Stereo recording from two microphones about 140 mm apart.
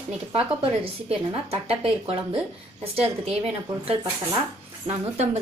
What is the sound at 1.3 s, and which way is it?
Speech, 45° right (ahead or behind).